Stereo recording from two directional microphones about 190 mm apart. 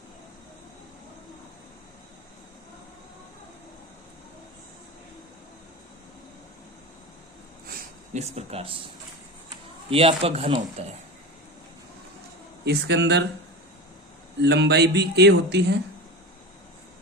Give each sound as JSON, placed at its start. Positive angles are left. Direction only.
{"t": 7.7, "sound": "a sound", "side_deg": -50}
{"t": 8.2, "sound": "speech", "side_deg": -35}
{"t": 9.9, "sound": "speech", "side_deg": -30}
{"t": 12.6, "sound": "speech", "side_deg": -60}
{"t": 14.4, "sound": "speech", "side_deg": -65}